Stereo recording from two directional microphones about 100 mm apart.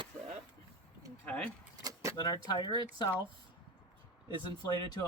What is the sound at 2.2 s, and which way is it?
Speech, 45° left (ahead or behind).